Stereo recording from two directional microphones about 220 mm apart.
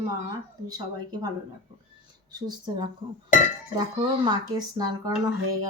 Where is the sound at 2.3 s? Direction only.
20° right (ahead or behind).